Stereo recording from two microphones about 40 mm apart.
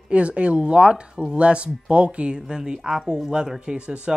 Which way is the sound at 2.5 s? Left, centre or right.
Centre.